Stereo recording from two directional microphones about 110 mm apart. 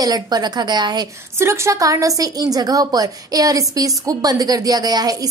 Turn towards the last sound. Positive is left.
turn(degrees=-35)  # may be behind; listen again after turning